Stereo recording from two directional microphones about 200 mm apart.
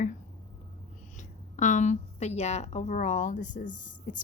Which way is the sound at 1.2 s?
35° left (ahead or behind).